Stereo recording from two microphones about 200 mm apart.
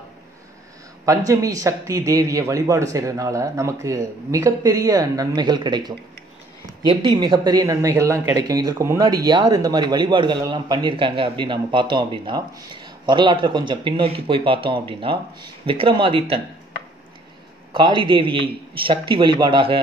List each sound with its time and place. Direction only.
1.0 s speech: 15° right (ahead or behind)
17.7 s speech: 25° right (ahead or behind)